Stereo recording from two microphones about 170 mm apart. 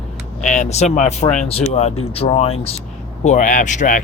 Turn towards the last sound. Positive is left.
turn(degrees=50)  # may be behind; listen again after turning